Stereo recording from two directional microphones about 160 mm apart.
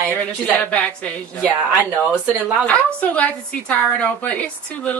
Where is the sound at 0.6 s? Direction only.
10° left (ahead or behind).